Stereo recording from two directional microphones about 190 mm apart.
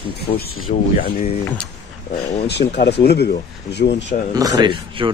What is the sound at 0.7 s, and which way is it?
Speech, 40° left (ahead or behind).